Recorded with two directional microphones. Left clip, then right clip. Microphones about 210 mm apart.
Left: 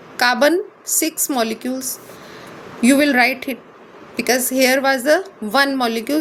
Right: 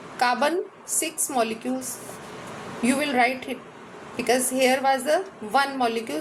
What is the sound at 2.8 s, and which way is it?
A woman's voice, 40° left (ahead or behind).